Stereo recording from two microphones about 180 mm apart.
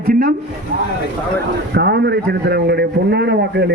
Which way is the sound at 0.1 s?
55° right (ahead or behind).